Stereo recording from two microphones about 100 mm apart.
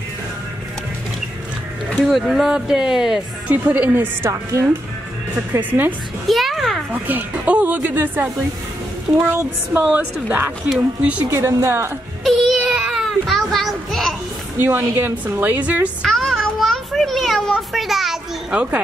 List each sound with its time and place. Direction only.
1.9 s speech: centre (ahead or behind); by 4.3 s 20° right (ahead or behind)
4.3 s speech: 30° right (ahead or behind)
5.5 s speech: 20° right (ahead or behind)
6.2 s a sound: centre (ahead or behind)
6.9 s speech: 15° right (ahead or behind)
9.3 s speech: 20° right (ahead or behind)
11.2 s a woman's voice: 30° right (ahead or behind)
12.3 s a sound: centre (ahead or behind)
14.6 s a woman's voice: 20° right (ahead or behind)
16.1 s children playing: 5° left (ahead or behind)